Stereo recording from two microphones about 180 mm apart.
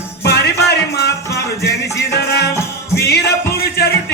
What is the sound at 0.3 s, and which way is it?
Music, 65° left (ahead or behind).